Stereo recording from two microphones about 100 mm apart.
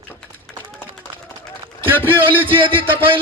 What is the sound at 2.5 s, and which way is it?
Speech, 60° right (ahead or behind).